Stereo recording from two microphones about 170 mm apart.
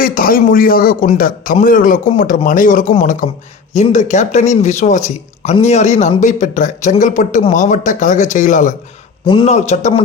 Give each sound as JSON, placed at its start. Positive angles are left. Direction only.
{"t": 0.0, "sound": "a man's voice", "side_deg": 55}
{"t": 9.2, "sound": "a man's voice", "side_deg": 30}
{"t": 9.5, "sound": "a man's voice", "side_deg": 40}